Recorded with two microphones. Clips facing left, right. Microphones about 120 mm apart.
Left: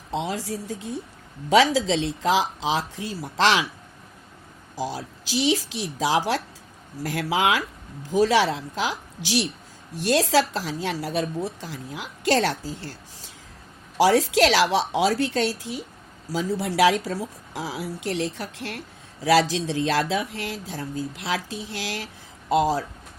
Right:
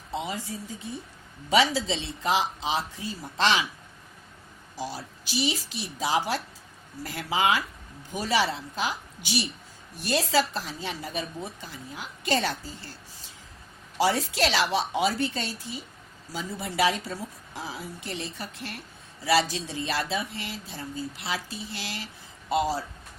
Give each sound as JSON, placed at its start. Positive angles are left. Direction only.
{"t": 0.1, "sound": "speech", "side_deg": 90}
{"t": 4.9, "sound": "speech", "side_deg": 90}